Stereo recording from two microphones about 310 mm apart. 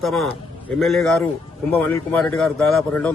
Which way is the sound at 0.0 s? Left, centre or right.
Centre.